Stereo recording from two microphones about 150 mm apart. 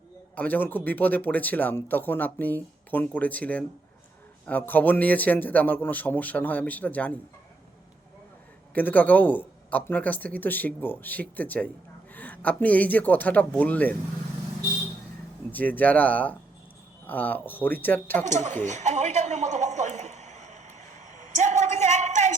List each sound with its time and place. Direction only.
0.3 s speech: 10° left (ahead or behind)
8.7 s speech: 10° left (ahead or behind)
15.5 s speech: 10° left (ahead or behind)
18.3 s a sound: 55° right (ahead or behind)